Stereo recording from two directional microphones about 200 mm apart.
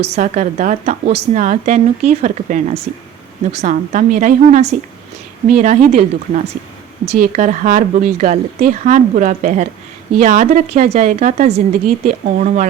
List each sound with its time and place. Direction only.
0.2 s speech: 35° right (ahead or behind)